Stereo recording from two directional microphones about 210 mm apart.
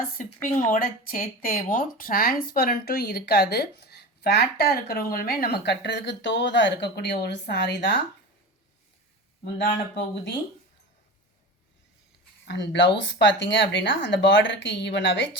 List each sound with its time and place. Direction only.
0.7 s speech: 40° left (ahead or behind); by 7.9 s 55° left (ahead or behind)
9.9 s speech: 55° left (ahead or behind)
12.5 s speech: 55° left (ahead or behind)